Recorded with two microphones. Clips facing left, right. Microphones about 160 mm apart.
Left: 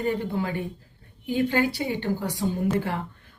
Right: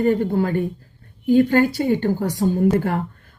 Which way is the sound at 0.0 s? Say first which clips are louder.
Right 8 dB; 45° right (ahead or behind).